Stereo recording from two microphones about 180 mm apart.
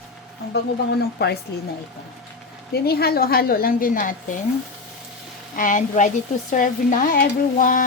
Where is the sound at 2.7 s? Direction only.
60° left (ahead or behind).